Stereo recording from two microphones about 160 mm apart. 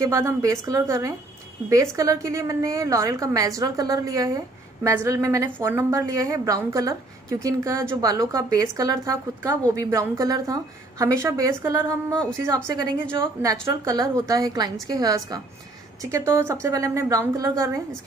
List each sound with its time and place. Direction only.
0.0 s a woman's voice: 20° right (ahead or behind)
13.4 s a woman's voice: 20° right (ahead or behind)